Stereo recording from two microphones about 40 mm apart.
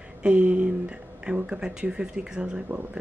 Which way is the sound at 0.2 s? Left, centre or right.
Right.